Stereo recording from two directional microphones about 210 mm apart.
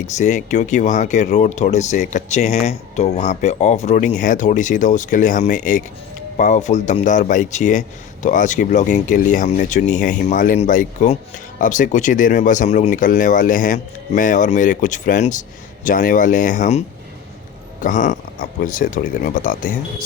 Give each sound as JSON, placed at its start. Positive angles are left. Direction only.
{"t": 0.2, "sound": "speech", "side_deg": 35}
{"t": 17.8, "sound": "speech", "side_deg": 35}